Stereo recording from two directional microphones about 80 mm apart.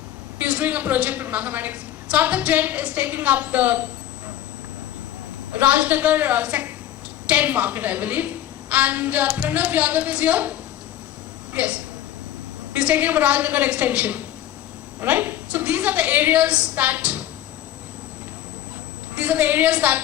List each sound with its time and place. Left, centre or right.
0.3 s a woman's voice: centre
5.5 s a woman's voice: centre
19.1 s a woman's voice: centre